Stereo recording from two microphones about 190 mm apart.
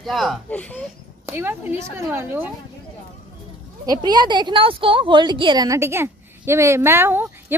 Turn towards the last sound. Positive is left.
turn(degrees=-10)  # may be behind; listen again after turning